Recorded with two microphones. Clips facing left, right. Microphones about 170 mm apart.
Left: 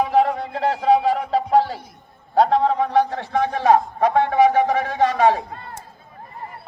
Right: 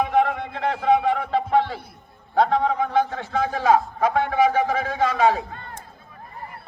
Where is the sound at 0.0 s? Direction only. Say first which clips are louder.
Left 2 dB; 35° left (ahead or behind).